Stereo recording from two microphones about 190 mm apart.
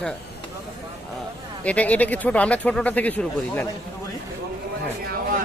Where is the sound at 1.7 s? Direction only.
5° left (ahead or behind).